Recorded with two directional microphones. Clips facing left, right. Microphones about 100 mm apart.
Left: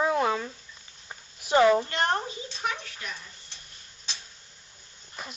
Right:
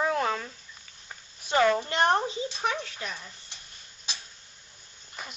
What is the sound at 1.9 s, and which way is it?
Speech, 20° right (ahead or behind).